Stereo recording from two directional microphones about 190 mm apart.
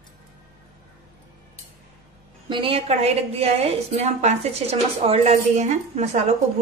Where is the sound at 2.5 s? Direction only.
30° right (ahead or behind).